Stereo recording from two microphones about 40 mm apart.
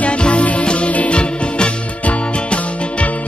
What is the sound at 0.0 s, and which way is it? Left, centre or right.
Music, left.